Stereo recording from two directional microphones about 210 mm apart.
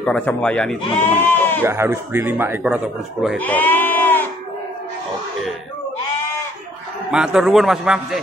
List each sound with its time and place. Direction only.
0.0 s speech: 5° left (ahead or behind)
1.6 s speech: 10° right (ahead or behind)
3.3 s sheep: 10° left (ahead or behind)
7.1 s a man's voice: 5° right (ahead or behind)